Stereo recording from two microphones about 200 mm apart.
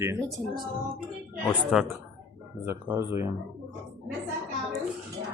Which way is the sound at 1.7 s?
5° right (ahead or behind).